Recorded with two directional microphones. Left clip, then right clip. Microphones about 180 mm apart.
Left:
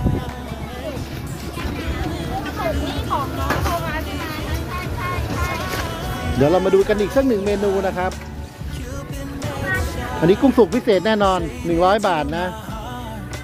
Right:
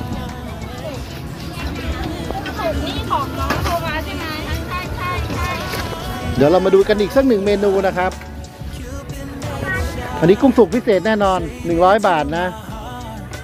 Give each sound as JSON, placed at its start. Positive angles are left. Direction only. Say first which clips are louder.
{"t": 3.1, "sound": "music", "louder": "right 2 dB", "side_deg": 0}
{"t": 6.1, "sound": "speech", "louder": "right 3 dB", "side_deg": 0}
{"t": 10.2, "sound": "speech", "louder": "right 2 dB", "side_deg": 15}
{"t": 11.7, "sound": "speech", "louder": "right 3 dB", "side_deg": 20}